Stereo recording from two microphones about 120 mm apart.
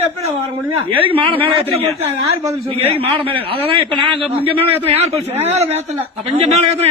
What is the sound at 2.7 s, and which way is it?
A man's voice, 55° right (ahead or behind).